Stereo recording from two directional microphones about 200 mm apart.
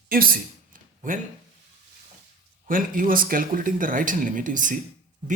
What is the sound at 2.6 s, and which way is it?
A man's voice, 45° right (ahead or behind).